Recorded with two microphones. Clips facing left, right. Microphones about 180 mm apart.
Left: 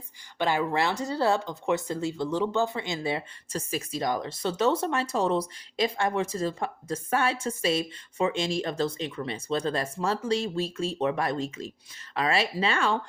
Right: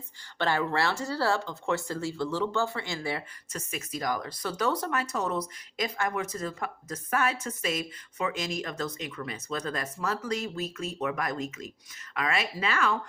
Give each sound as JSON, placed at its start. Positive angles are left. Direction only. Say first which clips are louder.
{"t": 0.3, "sound": "speech", "louder": "left 2 dB", "side_deg": 15}